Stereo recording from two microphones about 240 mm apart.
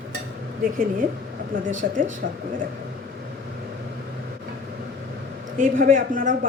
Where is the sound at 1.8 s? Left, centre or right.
Right.